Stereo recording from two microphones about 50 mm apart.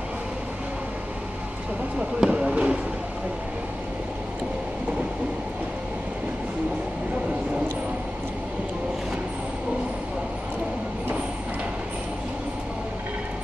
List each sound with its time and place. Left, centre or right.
2.0 s fireworks: centre